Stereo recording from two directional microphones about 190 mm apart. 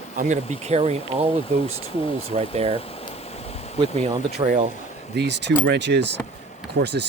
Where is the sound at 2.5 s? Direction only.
30° right (ahead or behind).